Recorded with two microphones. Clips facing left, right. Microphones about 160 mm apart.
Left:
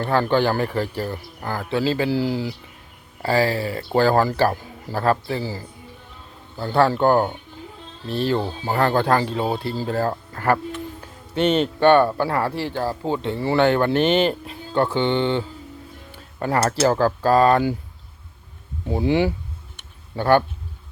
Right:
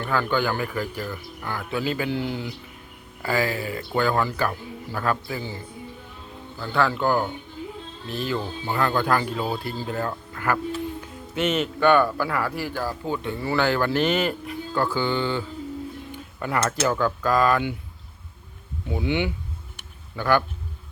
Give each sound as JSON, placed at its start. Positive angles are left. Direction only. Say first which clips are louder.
{"t": 0.0, "sound": "speech", "louder": "left 5 dB", "side_deg": 35}
{"t": 16.1, "sound": "speech", "louder": "left 5 dB", "side_deg": 35}
{"t": 18.9, "sound": "speech", "louder": "left 5 dB", "side_deg": 35}